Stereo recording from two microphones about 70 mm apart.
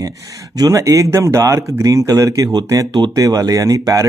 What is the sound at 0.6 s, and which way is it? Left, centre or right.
Speech, right.